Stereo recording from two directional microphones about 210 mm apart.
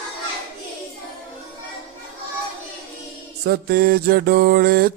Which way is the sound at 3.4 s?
50° right (ahead or behind).